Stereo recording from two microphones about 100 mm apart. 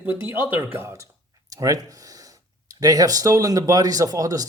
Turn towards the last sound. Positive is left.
turn(degrees=-35)  # may be behind; listen again after turning